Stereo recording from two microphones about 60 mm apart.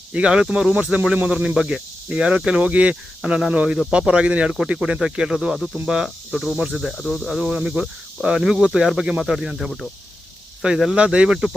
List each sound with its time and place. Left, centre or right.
0.1 s speech: centre
3.2 s speech: centre
10.9 s speech: centre